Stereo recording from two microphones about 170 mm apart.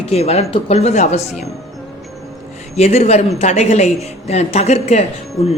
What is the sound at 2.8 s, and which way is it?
A woman's voice, 35° left (ahead or behind).